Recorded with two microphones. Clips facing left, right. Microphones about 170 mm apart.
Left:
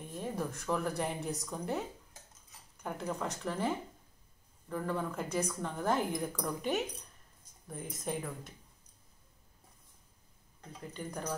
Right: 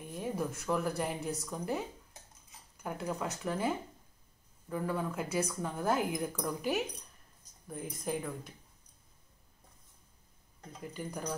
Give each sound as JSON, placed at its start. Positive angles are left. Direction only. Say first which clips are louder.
{"t": 0.1, "sound": "a woman's voice", "louder": "right 2 dB", "side_deg": -5}
{"t": 10.9, "sound": "a woman's voice", "louder": "even", "side_deg": -5}